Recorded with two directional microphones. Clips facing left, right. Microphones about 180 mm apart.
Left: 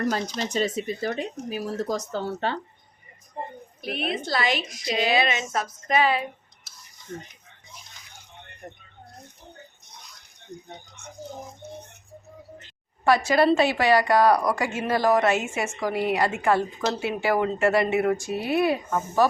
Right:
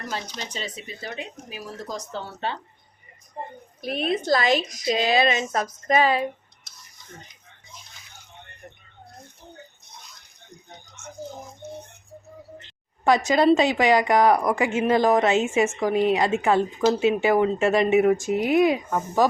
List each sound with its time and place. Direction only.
0.1 s speech: 45° left (ahead or behind)
3.8 s a woman's voice: 40° right (ahead or behind)
13.1 s a woman's voice: 20° right (ahead or behind)